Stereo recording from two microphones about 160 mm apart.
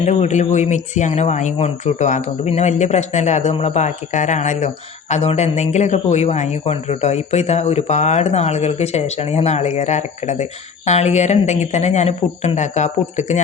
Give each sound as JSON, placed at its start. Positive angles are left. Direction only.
{"t": 0.0, "sound": "speech", "side_deg": 45}